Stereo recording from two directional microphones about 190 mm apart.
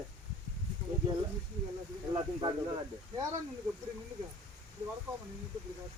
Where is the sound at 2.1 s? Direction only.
25° right (ahead or behind).